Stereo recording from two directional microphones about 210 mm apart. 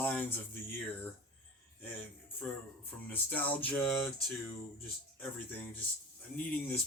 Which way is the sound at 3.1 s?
10° left (ahead or behind).